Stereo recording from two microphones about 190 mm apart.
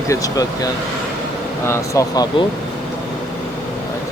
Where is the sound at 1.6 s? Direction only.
15° left (ahead or behind).